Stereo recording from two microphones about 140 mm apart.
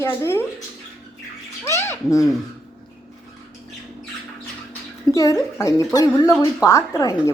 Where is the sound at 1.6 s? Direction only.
20° left (ahead or behind).